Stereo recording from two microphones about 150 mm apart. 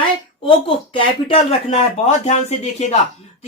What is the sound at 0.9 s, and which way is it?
Speech, 40° left (ahead or behind).